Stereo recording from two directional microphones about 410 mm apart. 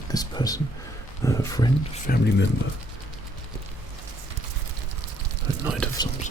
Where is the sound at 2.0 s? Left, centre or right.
Left.